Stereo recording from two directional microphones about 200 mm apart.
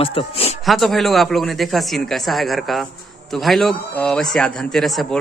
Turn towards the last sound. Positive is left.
turn(degrees=0)  # may be behind; listen again after turning